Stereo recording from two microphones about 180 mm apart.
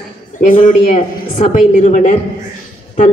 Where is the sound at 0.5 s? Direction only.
45° left (ahead or behind).